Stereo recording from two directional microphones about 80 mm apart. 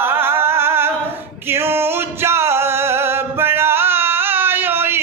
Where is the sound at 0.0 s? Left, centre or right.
Right.